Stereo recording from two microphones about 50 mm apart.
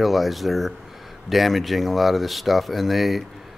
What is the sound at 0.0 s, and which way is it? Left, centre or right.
Speech, centre.